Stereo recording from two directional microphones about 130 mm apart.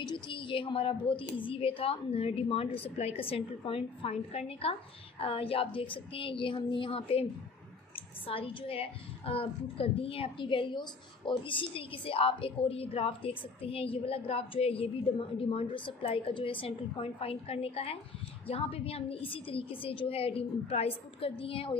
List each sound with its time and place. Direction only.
0.0 s a woman's voice: 40° left (ahead or behind)
8.3 s a woman's voice: 45° left (ahead or behind)